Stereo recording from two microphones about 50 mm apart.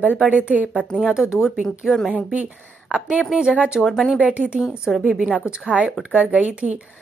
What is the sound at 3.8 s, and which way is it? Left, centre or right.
Speech, centre.